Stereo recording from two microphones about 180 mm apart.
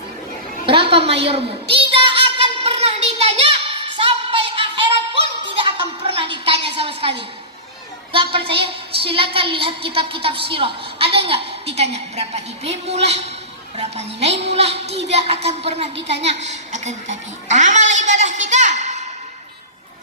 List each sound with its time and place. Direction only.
0.6 s a sound: 30° right (ahead or behind)
5.4 s music: 30° right (ahead or behind)
6.7 s a sound: 30° right (ahead or behind)
8.1 s a woman's voice: 30° right (ahead or behind)
16.0 s a woman's voice: 75° right (ahead or behind)
16.2 s a child's voice: 40° right (ahead or behind)